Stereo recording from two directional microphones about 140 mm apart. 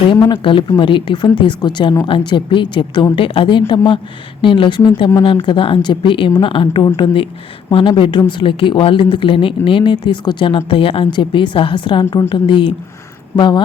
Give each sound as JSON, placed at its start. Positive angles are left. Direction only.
{"t": 0.1, "sound": "speech", "side_deg": 30}